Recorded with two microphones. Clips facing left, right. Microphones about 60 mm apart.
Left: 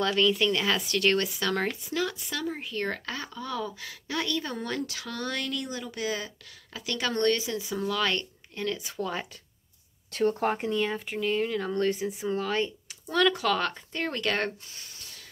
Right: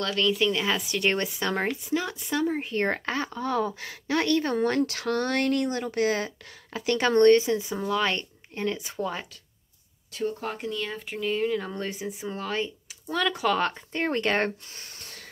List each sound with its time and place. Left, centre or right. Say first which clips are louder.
0.0 s speech: even; centre
2.2 s speech: right 6 dB; right
6.7 s a woman's voice: right 8 dB; right; by 9.1 s centre
10.4 s speech: left 5 dB; left
10.7 s speech: left 4 dB; centre
13.9 s speech: right 4 dB; right